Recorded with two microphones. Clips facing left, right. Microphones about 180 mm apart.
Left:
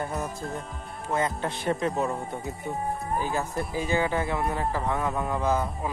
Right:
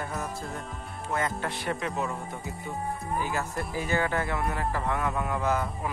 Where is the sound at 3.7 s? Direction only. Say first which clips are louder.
Left 2 dB; 15° left (ahead or behind).